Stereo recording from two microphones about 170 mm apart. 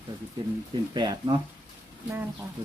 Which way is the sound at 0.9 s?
25° right (ahead or behind).